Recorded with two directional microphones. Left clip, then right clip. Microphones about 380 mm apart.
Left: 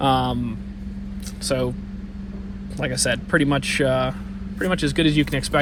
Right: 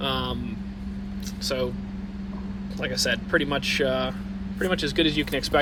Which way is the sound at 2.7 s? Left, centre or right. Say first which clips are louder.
Left 3 dB; centre.